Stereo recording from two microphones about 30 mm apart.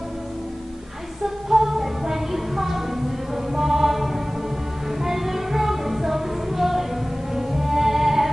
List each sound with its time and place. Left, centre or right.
1.2 s music: centre